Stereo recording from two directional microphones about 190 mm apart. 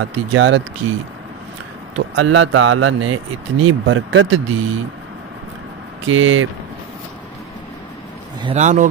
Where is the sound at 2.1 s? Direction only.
85° right.